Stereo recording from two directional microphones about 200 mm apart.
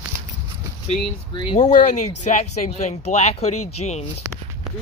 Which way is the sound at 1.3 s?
25° left (ahead or behind).